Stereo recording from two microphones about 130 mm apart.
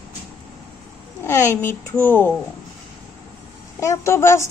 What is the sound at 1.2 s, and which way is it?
A woman's voice, 20° left (ahead or behind).